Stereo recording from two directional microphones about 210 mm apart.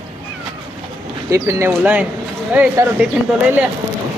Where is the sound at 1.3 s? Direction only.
15° right (ahead or behind).